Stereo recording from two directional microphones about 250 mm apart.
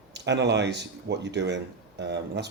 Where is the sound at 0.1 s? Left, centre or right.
Right.